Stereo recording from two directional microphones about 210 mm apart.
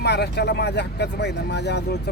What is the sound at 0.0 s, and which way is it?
Speech, 55° left (ahead or behind).